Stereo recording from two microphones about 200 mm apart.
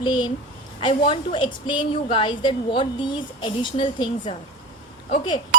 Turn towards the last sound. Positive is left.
turn(degrees=25)  # may be behind; listen again after turning